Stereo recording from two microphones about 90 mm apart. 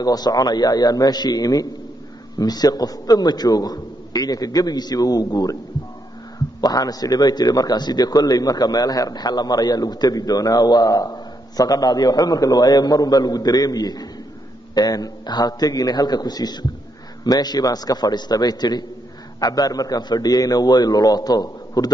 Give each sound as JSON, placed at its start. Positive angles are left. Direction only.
{"t": 0.0, "sound": "a man's voice", "side_deg": 45}
{"t": 6.6, "sound": "a man's voice", "side_deg": 45}